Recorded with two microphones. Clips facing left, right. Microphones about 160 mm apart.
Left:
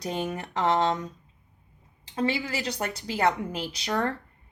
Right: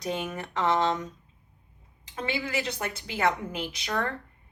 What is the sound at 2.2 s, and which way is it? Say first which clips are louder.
A woman's voice: left 3 dB; 35° left (ahead or behind).